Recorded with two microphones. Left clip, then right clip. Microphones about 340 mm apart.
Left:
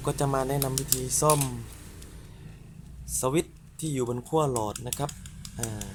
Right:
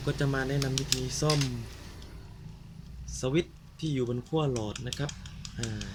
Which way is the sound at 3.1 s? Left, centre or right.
Centre.